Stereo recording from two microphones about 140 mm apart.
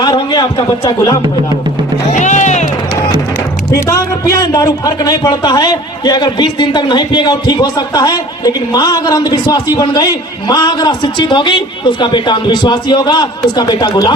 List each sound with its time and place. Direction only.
0.0 s a sound: 30° left (ahead or behind)
0.9 s speech: 30° left (ahead or behind)
2.1 s music: 60° left (ahead or behind)
3.8 s a man's voice: 25° left (ahead or behind)